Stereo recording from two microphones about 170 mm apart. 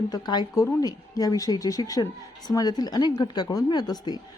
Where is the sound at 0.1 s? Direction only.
25° left (ahead or behind).